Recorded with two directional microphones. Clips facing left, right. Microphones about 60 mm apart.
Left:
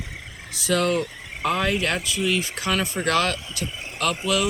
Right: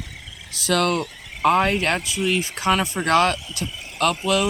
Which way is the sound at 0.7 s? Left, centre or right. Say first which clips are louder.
Right 1 dB; right.